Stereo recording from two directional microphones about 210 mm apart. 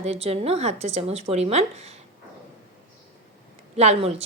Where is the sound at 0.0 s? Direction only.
30° right (ahead or behind).